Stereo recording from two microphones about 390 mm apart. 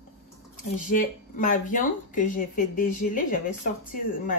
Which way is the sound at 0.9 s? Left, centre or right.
Centre.